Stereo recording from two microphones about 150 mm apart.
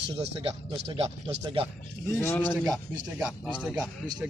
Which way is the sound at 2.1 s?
15° left (ahead or behind).